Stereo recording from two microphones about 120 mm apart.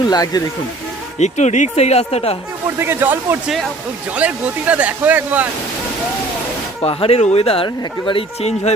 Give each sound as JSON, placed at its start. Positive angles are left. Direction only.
{"t": 0.0, "sound": "speech", "side_deg": 35}
{"t": 1.2, "sound": "speech", "side_deg": 75}
{"t": 2.7, "sound": "speech", "side_deg": -20}
{"t": 3.4, "sound": "speech", "side_deg": 0}
{"t": 6.8, "sound": "speech", "side_deg": 55}
{"t": 8.4, "sound": "speech", "side_deg": 65}